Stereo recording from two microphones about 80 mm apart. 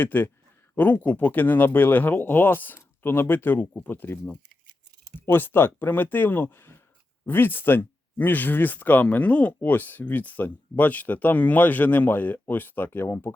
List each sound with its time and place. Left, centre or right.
0.0 s speech: left